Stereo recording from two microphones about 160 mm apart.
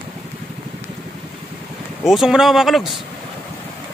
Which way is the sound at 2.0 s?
Centre (ahead or behind).